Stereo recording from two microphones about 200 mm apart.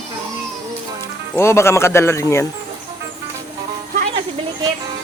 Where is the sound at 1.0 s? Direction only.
10° left (ahead or behind).